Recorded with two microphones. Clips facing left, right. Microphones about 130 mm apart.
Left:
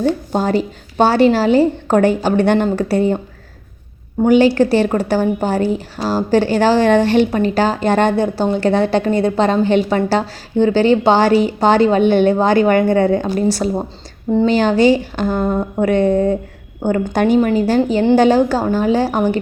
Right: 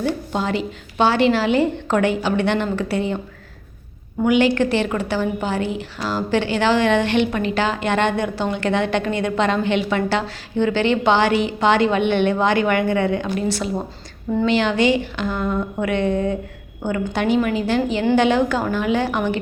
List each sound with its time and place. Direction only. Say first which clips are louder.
0.3 s a woman's voice: left 6 dB; 45° left (ahead or behind)
4.2 s a woman's voice: left 5 dB; 35° left (ahead or behind)